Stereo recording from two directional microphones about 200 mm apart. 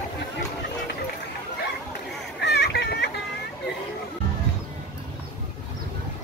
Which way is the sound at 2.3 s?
55° left (ahead or behind).